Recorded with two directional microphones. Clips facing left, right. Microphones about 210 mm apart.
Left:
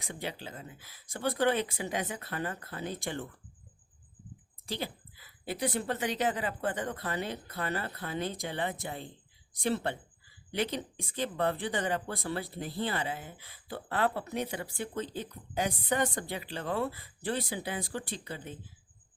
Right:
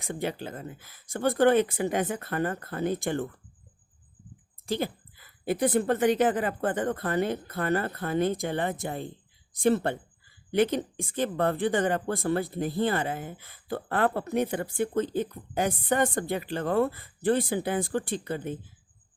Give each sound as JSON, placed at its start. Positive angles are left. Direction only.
{"t": 0.0, "sound": "speech", "side_deg": -50}
{"t": 4.6, "sound": "speech", "side_deg": -50}